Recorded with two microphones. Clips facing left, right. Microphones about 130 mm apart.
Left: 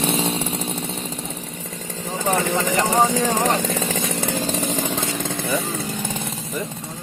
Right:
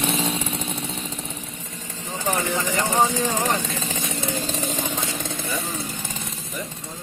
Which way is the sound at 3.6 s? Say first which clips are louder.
Left 6 dB; 85° left.